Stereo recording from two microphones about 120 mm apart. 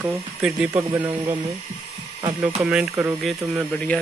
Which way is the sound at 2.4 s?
10° right (ahead or behind).